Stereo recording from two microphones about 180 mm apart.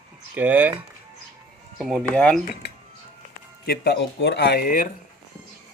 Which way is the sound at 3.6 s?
60° left (ahead or behind).